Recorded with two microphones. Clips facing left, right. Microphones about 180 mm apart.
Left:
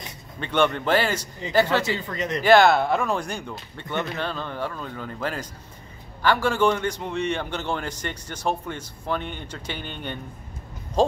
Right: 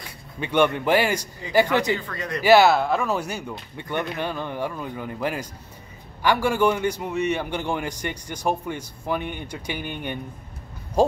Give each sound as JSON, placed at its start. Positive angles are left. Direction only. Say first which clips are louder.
{"t": 0.4, "sound": "a man's voice", "louder": "right 2 dB", "side_deg": -10}
{"t": 2.0, "sound": "speech", "louder": "left 2 dB", "side_deg": 20}
{"t": 2.4, "sound": "a man's voice", "louder": "right 1 dB", "side_deg": -5}